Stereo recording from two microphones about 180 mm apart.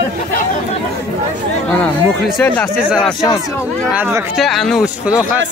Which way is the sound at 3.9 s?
10° right (ahead or behind).